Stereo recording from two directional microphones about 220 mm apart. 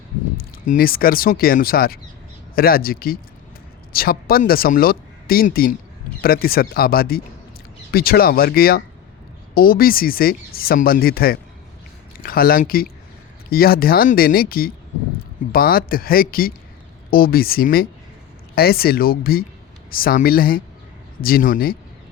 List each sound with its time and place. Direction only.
0.3 s speech: 40° left (ahead or behind)